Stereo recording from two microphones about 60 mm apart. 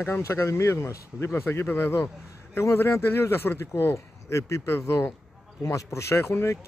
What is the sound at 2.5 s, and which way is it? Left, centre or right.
Speech, left.